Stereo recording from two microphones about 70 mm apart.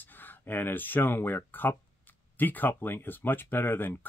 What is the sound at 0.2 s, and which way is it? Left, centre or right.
Speech, left.